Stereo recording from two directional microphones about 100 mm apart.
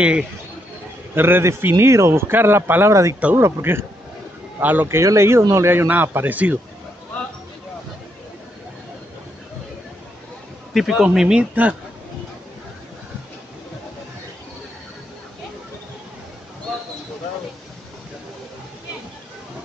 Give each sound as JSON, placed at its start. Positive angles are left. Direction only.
{"t": 0.0, "sound": "speech", "side_deg": -10}
{"t": 1.1, "sound": "speech", "side_deg": -20}
{"t": 10.7, "sound": "speech", "side_deg": 0}